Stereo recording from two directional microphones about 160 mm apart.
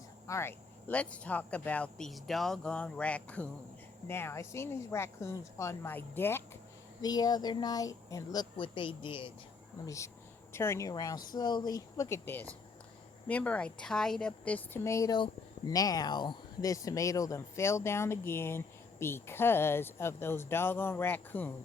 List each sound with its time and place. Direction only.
0.3 s a woman's voice: 15° left (ahead or behind)
7.0 s speech: 25° left (ahead or behind)
9.8 s a woman's voice: 20° left (ahead or behind)